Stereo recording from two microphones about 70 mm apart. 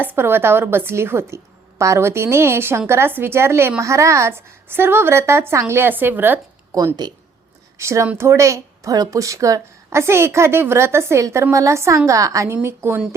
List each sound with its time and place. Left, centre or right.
0.0 s a woman's voice: right
6.7 s speech: right
7.8 s a woman's voice: right
12.6 s a woman's voice: right